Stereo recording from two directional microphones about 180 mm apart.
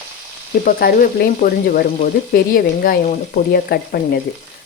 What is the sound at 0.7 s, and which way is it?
Speech, 55° left (ahead or behind).